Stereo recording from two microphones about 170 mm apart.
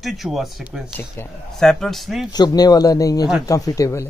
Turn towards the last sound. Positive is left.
turn(degrees=15)  # may be behind; listen again after turning